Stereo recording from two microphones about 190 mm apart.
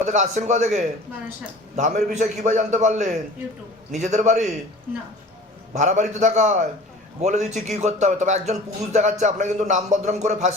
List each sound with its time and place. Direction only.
0.0 s a man's voice: 40° right (ahead or behind)
5.7 s a man's voice: 40° right (ahead or behind)